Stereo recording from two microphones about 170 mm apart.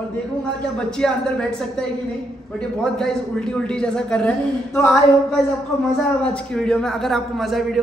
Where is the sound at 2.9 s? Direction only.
5° left (ahead or behind).